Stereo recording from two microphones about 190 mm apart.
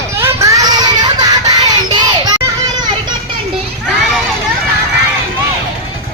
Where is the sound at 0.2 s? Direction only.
15° right (ahead or behind).